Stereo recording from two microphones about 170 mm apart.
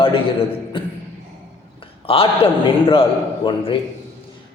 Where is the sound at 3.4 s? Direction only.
30° left (ahead or behind).